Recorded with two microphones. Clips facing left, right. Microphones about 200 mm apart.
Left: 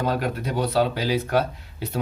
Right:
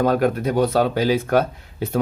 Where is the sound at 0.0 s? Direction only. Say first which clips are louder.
Right 7 dB; 50° right (ahead or behind).